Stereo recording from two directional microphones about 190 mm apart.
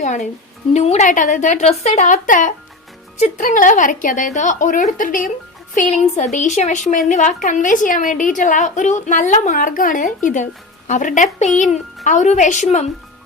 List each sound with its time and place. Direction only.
0.0 s a woman's voice: 40° left (ahead or behind)